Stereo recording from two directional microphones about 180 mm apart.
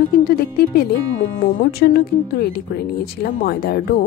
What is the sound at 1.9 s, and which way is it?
Speech, 60° left (ahead or behind).